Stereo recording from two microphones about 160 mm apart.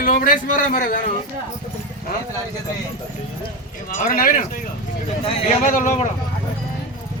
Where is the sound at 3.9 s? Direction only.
65° left (ahead or behind).